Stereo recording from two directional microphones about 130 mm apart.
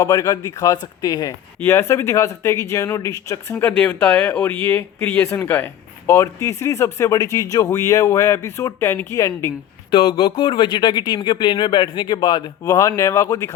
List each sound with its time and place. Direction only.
0.0 s speech: 25° left (ahead or behind)
9.9 s speech: 45° left (ahead or behind); by 13.5 s 25° left (ahead or behind)